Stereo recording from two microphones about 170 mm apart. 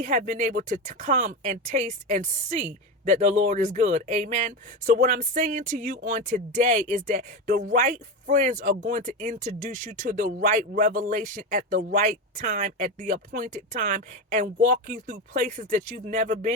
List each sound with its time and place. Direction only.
0.0 s speech: 50° right (ahead or behind)